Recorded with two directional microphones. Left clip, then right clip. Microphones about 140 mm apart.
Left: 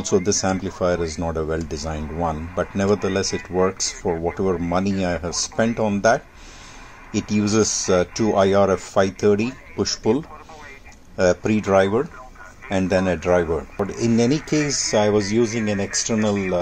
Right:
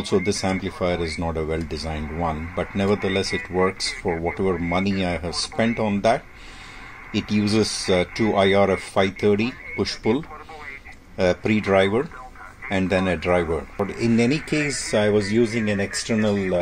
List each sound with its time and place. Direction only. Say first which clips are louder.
0.0 s speech: left 2 dB; 15° left (ahead or behind)